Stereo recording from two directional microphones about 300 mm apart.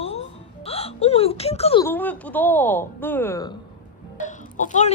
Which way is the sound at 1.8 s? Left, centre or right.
Centre.